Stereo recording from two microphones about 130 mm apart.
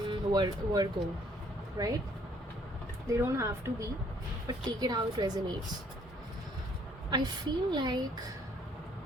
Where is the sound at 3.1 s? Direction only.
20° right (ahead or behind).